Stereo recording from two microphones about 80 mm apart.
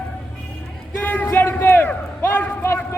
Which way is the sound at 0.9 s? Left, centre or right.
Left.